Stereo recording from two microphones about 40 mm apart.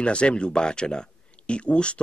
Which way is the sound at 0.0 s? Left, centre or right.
Left.